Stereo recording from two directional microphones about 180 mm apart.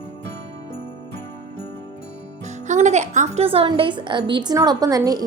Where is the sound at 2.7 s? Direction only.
40° right (ahead or behind).